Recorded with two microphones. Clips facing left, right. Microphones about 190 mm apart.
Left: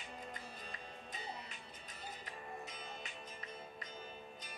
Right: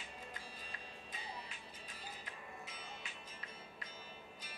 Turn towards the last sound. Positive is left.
turn(degrees=45)  # may be behind; listen again after turning